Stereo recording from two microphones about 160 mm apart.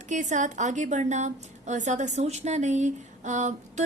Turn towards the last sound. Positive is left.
turn(degrees=-45)  # may be behind; listen again after turning